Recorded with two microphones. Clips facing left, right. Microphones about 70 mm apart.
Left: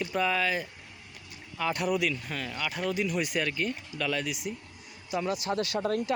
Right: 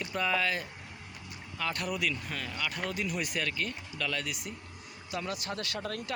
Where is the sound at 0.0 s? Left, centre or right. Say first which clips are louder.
Left 3 dB; centre.